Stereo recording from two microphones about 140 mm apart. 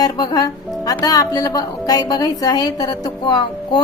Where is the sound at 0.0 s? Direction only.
30° left (ahead or behind).